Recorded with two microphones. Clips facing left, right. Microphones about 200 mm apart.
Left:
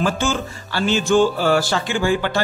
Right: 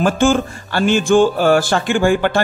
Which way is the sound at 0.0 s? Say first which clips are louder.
Right 7 dB; 50° right (ahead or behind).